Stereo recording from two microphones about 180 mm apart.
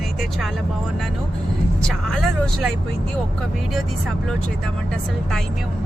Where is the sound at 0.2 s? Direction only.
Centre (ahead or behind).